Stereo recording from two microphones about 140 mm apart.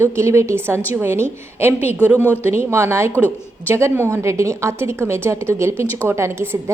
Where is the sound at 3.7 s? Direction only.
20° right (ahead or behind).